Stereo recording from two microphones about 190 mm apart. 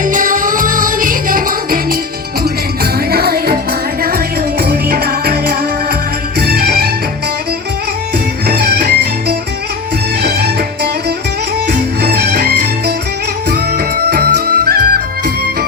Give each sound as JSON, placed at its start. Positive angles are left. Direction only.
{"t": 0.0, "sound": "music", "side_deg": -45}
{"t": 3.1, "sound": "music", "side_deg": -55}
{"t": 4.6, "sound": "music", "side_deg": -55}
{"t": 8.4, "sound": "music", "side_deg": -55}
{"t": 10.2, "sound": "music", "side_deg": -55}
{"t": 11.7, "sound": "music", "side_deg": -55}